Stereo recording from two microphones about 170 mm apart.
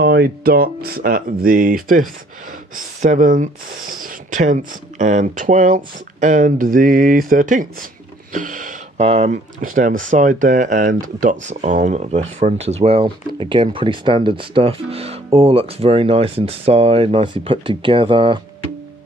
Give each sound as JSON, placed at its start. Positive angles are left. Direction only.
{"t": 0.0, "sound": "speech", "side_deg": -65}
{"t": 8.3, "sound": "a sound", "side_deg": -50}
{"t": 9.0, "sound": "speech", "side_deg": -40}